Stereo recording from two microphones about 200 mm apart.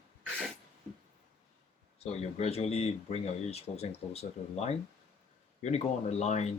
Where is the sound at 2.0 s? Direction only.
30° left (ahead or behind).